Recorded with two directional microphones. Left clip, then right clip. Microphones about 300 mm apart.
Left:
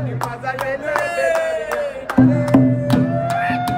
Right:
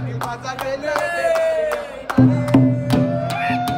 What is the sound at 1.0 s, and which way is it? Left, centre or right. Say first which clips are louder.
Music: right 1 dB; centre.